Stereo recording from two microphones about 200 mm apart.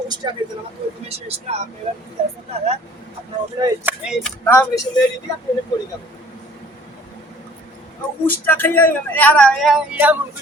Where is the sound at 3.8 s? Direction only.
Centre (ahead or behind).